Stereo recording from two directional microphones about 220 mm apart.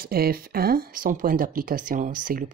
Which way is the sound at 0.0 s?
45° right (ahead or behind).